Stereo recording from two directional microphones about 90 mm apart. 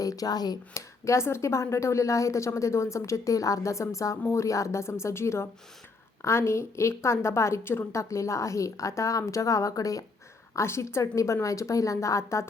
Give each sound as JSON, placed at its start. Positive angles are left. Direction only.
{"t": 0.0, "sound": "speech", "side_deg": 40}